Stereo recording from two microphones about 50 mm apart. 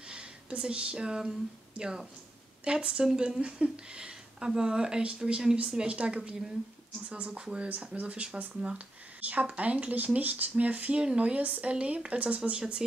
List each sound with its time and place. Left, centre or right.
0.1 s speech: centre